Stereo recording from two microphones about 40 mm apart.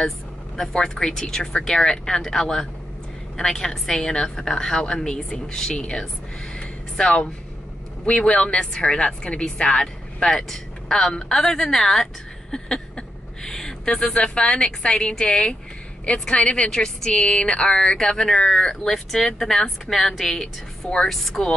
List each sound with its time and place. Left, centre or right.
0.6 s a woman's voice: centre
6.5 s a sound: left
8.2 s a woman's voice: left
21.1 s speech: centre